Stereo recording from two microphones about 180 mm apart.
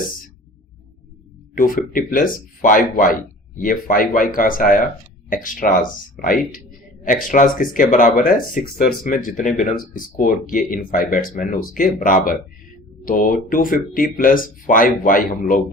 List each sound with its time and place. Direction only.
1.5 s speech: 50° left (ahead or behind)